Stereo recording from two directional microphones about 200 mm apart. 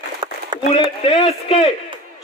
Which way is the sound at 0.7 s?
30° left (ahead or behind).